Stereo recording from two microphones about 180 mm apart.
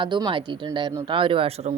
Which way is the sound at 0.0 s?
25° right (ahead or behind).